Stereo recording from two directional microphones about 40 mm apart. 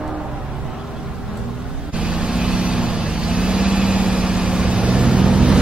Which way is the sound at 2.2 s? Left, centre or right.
Right.